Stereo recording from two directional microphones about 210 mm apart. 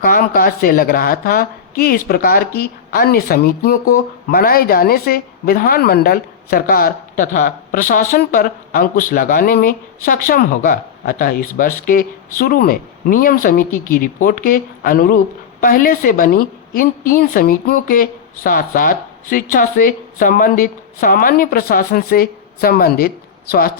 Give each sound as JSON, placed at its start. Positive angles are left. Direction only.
{"t": 0.0, "sound": "a woman's voice", "side_deg": 40}